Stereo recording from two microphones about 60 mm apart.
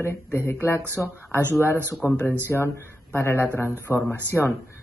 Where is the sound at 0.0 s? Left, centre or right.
Left.